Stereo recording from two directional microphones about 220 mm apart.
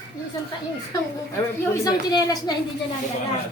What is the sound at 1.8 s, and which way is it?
Speech, 20° left (ahead or behind).